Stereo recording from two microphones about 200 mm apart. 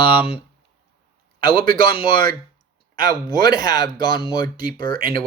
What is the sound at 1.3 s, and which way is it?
A man's voice, 25° left (ahead or behind).